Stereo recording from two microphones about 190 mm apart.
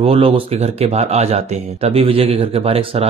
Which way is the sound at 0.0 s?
30° right (ahead or behind).